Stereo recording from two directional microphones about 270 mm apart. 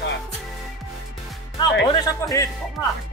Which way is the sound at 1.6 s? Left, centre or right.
Centre.